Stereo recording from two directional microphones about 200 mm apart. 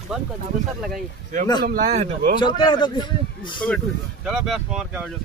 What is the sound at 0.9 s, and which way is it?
Speech, 40° right (ahead or behind).